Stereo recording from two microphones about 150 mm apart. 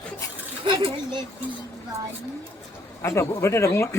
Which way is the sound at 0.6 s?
35° right (ahead or behind).